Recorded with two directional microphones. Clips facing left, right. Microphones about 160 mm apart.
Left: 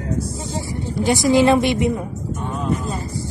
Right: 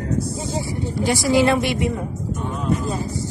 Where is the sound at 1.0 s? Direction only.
20° left (ahead or behind).